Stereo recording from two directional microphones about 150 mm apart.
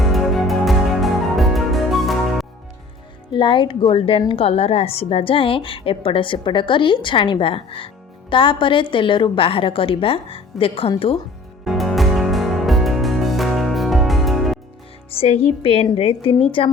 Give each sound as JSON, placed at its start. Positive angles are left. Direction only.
{"t": 0.0, "sound": "music", "side_deg": 0}
{"t": 3.3, "sound": "a woman's voice", "side_deg": 35}
{"t": 11.6, "sound": "music", "side_deg": 0}
{"t": 15.1, "sound": "a woman's voice", "side_deg": 40}